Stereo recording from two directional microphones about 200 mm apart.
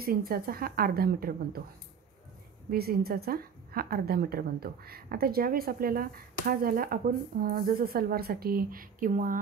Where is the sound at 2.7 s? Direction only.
50° right (ahead or behind).